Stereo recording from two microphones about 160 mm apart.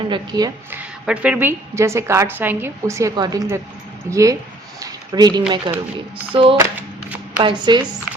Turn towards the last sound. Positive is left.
turn(degrees=-30)  # may be behind; listen again after turning